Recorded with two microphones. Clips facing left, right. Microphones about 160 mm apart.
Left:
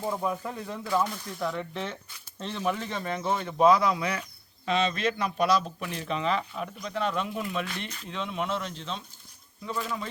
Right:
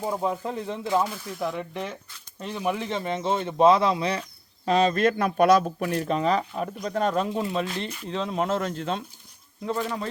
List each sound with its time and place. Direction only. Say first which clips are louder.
0.0 s speech: right 3 dB; 20° right (ahead or behind)
1.0 s speech: right 2 dB; 5° right (ahead or behind); by 4.2 s 30° right (ahead or behind)
4.6 s speech: right 6 dB; 45° right (ahead or behind)
7.3 s speech: right 5 dB; 30° right (ahead or behind); by 9.0 s 55° right (ahead or behind)